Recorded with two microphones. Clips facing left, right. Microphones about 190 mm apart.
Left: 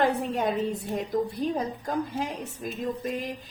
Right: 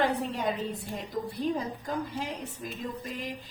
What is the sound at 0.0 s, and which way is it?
A woman's voice, 45° left (ahead or behind).